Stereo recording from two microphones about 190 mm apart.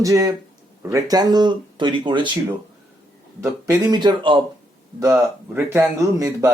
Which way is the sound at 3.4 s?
20° right (ahead or behind).